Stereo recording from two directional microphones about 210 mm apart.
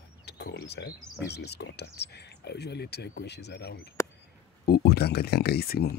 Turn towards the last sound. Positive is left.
turn(degrees=50)  # may be behind; listen again after turning